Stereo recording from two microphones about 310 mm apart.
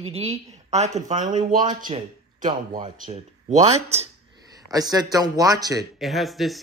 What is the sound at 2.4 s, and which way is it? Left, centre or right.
A man's voice, centre.